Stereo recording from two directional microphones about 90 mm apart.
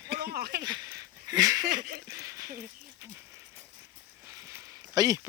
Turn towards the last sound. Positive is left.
turn(degrees=-45)  # may be behind; listen again after turning